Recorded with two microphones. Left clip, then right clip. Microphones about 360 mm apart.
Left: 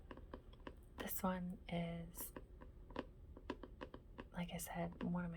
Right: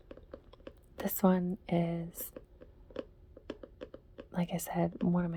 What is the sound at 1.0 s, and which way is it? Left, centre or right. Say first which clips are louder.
A woman's voice: right 13 dB; centre.